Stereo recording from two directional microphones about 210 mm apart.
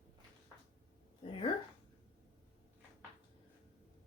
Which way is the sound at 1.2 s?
25° left (ahead or behind).